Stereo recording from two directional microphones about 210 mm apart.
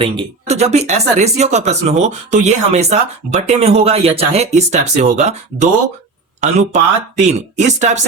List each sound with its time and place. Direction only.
0.0 s speech: 30° right (ahead or behind)